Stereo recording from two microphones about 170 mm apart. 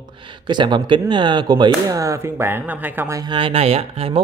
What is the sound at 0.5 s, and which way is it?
Speech, 25° right (ahead or behind).